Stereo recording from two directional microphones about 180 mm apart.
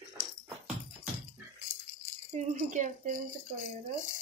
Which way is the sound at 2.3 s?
45° right (ahead or behind).